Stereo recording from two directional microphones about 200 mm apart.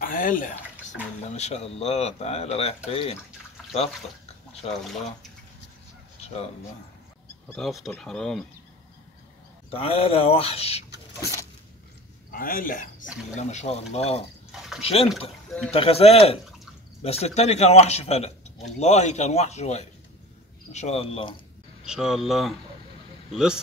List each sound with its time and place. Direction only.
0.0 s speech: 40° left (ahead or behind)
6.2 s speech: 30° left (ahead or behind)
7.4 s speech: centre (ahead or behind)
9.7 s speech: 30° left (ahead or behind)
12.3 s speech: 45° left (ahead or behind); by 21.4 s 30° left (ahead or behind)
21.8 s speech: 5° right (ahead or behind)